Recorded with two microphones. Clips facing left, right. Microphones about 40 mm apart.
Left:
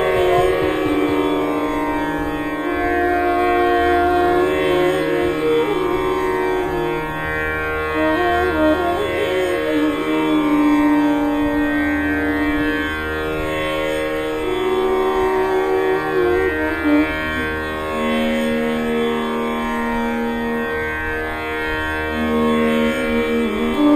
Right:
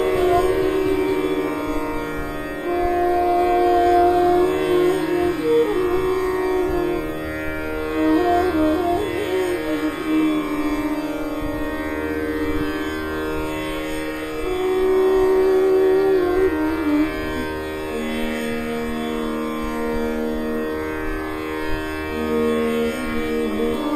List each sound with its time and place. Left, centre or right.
0.0 s music: left
2.8 s a sound: left
8.0 s music: left
14.7 s music: left
22.3 s music: left